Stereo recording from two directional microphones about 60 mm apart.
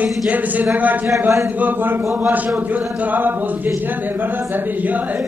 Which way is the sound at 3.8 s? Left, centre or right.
Right.